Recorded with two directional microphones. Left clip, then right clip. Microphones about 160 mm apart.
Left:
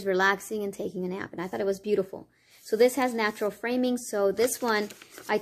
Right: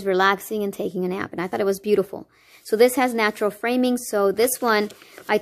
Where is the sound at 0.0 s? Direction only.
40° right (ahead or behind).